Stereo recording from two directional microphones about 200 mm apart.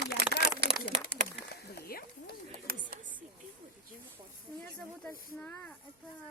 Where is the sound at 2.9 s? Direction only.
40° right (ahead or behind).